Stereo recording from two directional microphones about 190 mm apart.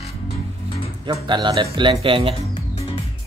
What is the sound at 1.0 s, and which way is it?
Speech, 25° right (ahead or behind).